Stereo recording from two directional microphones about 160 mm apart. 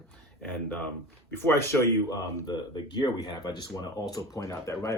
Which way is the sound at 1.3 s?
15° left (ahead or behind).